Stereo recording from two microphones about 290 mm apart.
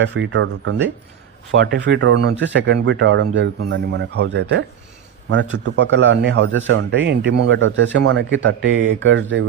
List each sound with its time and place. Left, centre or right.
0.0 s a man's voice: right